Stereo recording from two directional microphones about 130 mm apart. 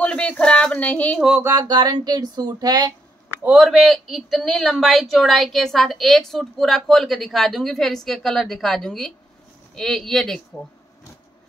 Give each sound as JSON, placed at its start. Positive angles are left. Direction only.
{"t": 0.0, "sound": "a sound", "side_deg": 10}
{"t": 1.4, "sound": "speech", "side_deg": -25}
{"t": 3.4, "sound": "speech", "side_deg": 0}